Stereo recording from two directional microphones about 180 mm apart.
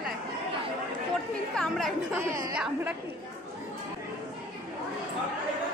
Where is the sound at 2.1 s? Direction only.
15° right (ahead or behind).